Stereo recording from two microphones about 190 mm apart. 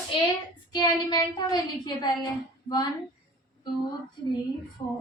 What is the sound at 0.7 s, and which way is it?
A woman's voice, 20° left (ahead or behind).